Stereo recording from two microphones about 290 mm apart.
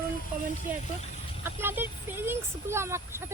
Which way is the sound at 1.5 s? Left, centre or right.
Centre.